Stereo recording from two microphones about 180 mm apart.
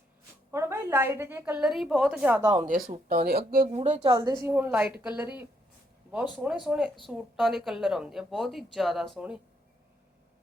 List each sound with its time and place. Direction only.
0.5 s a woman's voice: 15° right (ahead or behind)
2.4 s speech: 20° right (ahead or behind)
2.6 s speech: 50° right (ahead or behind)
3.7 s a woman's voice: 40° right (ahead or behind)
4.1 s speech: 20° right (ahead or behind)
4.4 s a woman's voice: 10° right (ahead or behind)